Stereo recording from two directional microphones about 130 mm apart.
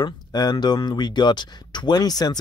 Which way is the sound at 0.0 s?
30° left (ahead or behind).